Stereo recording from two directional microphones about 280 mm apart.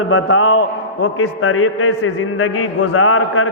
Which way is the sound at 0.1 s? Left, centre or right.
Left.